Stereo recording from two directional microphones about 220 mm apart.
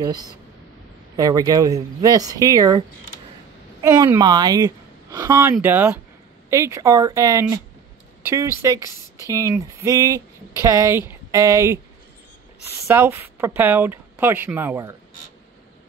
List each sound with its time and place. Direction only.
0.0 s speech: 15° right (ahead or behind)
3.8 s speech: 15° right (ahead or behind)